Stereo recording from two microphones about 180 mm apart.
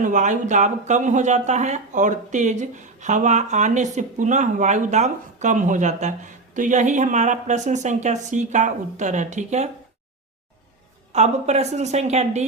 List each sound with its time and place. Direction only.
0.0 s speech: 45° right (ahead or behind)
11.1 s a woman's voice: 40° right (ahead or behind)